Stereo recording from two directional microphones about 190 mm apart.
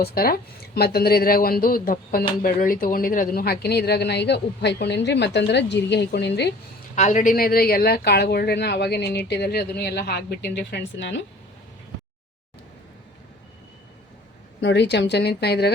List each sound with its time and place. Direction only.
0.0 s speech: 50° left (ahead or behind)
6.9 s speech: 40° left (ahead or behind); by 11.2 s 65° left (ahead or behind)
14.6 s speech: 65° left (ahead or behind)